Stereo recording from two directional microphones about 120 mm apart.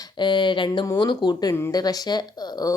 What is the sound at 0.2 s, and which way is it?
Speech, 40° left (ahead or behind).